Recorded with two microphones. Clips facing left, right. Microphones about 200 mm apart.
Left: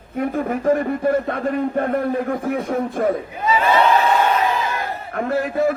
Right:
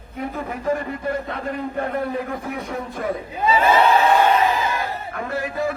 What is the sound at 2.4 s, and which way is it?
Speech, 50° left (ahead or behind).